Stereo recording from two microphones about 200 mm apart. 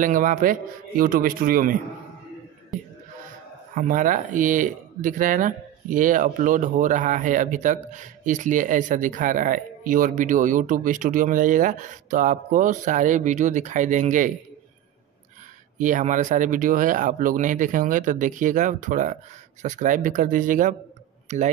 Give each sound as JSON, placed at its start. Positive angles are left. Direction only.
{"t": 0.0, "sound": "a man's voice", "side_deg": -40}
{"t": 3.7, "sound": "speech", "side_deg": -40}
{"t": 15.8, "sound": "speech", "side_deg": -40}